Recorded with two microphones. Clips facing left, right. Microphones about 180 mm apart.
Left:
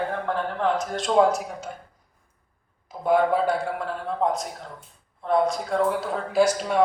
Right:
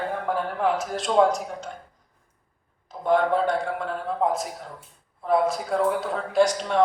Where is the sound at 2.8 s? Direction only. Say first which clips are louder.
Left 1 dB; 10° left (ahead or behind).